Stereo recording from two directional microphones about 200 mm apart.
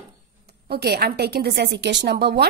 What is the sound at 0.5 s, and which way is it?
A woman's voice, 55° right (ahead or behind).